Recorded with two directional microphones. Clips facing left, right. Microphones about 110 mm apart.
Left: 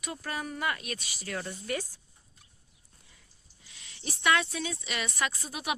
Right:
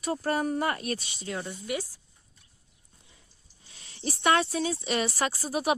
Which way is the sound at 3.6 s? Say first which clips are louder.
Right 8 dB; 35° right (ahead or behind).